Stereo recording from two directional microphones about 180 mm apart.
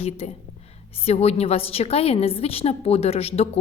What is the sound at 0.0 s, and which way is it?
A woman's voice, 35° left (ahead or behind).